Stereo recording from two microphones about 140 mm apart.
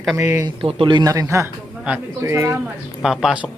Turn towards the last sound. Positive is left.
turn(degrees=0)  # may be behind; listen again after turning